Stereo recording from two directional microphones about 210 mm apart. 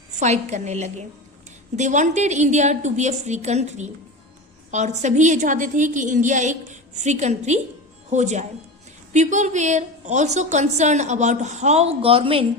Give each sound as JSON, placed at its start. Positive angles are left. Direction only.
{"t": 0.2, "sound": "a woman's voice", "side_deg": -35}